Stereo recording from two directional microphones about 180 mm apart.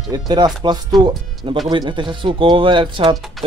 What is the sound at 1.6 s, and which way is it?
Speech, 25° right (ahead or behind).